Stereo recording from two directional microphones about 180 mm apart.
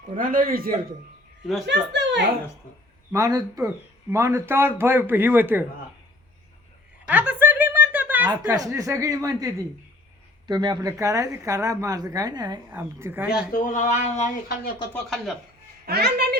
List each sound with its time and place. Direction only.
0.2 s a man's voice: 50° right (ahead or behind)
1.6 s a child's voice: 75° right (ahead or behind)
2.7 s speech: 45° left (ahead or behind)
3.1 s a man's voice: 20° right (ahead or behind)
7.1 s a sound: 10° right (ahead or behind)
8.4 s speech: 20° right (ahead or behind)
12.7 s a man's voice: 10° right (ahead or behind)
13.2 s speech: 55° left (ahead or behind)
14.9 s speech: centre (ahead or behind)
15.9 s a child's voice: 65° right (ahead or behind)